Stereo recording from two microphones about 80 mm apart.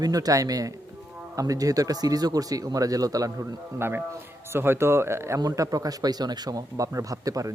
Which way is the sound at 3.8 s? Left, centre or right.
Right.